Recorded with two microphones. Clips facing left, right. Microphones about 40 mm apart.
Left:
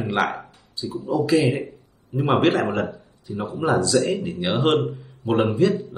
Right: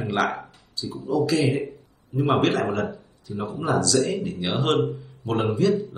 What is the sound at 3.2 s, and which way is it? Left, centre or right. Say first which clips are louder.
Speech: left 2 dB; left.